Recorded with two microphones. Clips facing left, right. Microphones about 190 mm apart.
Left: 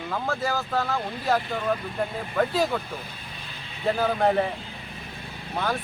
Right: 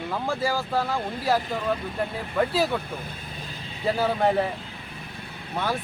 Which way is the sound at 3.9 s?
5° right (ahead or behind).